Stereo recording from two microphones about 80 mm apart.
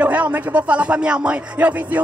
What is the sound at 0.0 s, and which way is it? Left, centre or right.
Speech, centre.